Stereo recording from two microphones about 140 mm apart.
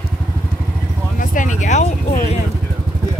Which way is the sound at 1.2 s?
70° left (ahead or behind).